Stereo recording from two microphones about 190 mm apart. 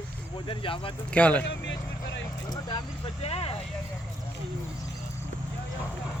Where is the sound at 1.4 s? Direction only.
70° left (ahead or behind).